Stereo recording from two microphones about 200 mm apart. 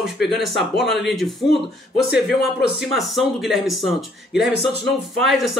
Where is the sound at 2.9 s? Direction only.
Centre (ahead or behind).